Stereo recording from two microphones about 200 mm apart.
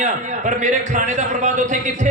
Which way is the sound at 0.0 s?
35° right (ahead or behind).